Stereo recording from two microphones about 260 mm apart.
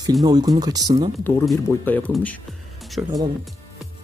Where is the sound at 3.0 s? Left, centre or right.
Centre.